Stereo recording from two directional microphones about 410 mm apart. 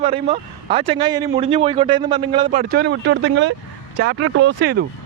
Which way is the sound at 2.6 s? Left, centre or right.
Right.